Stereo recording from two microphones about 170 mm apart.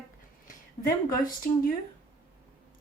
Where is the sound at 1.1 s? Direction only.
55° left (ahead or behind).